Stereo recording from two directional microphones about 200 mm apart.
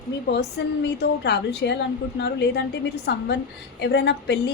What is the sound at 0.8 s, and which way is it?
A woman's voice, 55° left (ahead or behind).